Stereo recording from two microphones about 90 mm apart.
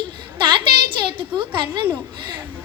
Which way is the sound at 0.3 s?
60° right (ahead or behind).